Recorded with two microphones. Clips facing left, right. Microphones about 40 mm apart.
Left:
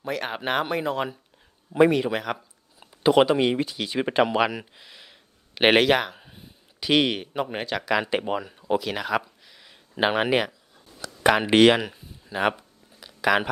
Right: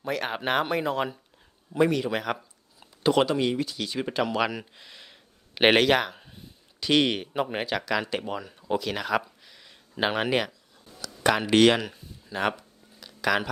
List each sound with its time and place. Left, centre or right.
0.0 s speech: centre
1.7 s a man's voice: left
2.0 s speech: centre
2.8 s speech: centre
4.4 s speech: centre
7.9 s speech: centre
11.0 s a sound: centre